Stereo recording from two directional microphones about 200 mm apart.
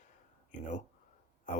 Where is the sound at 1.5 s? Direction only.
40° left (ahead or behind).